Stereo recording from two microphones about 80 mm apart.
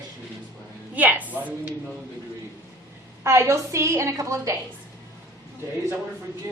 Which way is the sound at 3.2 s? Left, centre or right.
Right.